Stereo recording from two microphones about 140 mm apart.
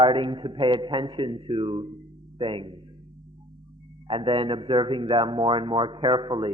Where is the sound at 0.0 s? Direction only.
35° right (ahead or behind).